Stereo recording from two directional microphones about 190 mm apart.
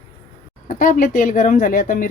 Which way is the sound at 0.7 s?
45° left (ahead or behind).